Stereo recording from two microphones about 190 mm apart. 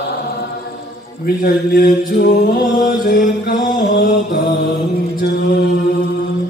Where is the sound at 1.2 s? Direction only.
55° left (ahead or behind).